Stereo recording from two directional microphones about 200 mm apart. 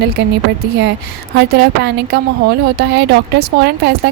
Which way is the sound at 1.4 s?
55° right (ahead or behind).